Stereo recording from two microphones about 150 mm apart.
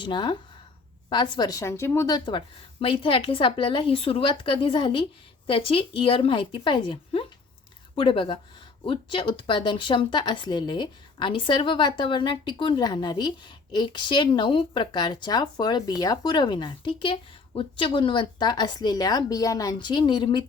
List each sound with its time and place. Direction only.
0.0 s speech: 30° left (ahead or behind)